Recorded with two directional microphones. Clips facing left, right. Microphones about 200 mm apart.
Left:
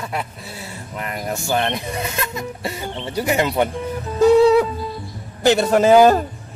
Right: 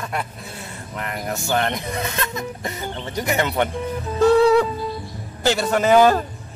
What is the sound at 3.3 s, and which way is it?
Music, 10° left (ahead or behind).